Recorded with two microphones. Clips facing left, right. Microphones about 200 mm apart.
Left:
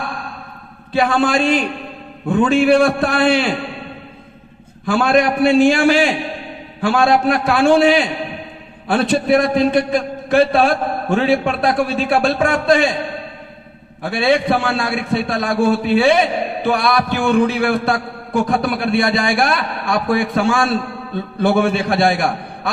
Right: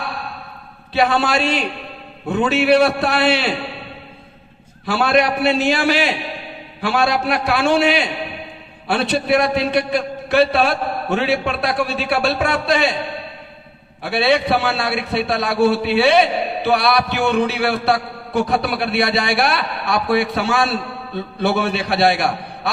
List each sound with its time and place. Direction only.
0.0 s a sound: 45° left (ahead or behind)
0.9 s a man's voice: 45° left (ahead or behind)
4.9 s a man's voice: 45° left (ahead or behind)
14.0 s a man's voice: 45° left (ahead or behind)